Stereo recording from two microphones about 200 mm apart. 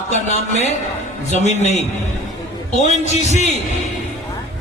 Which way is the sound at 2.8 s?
35° left (ahead or behind).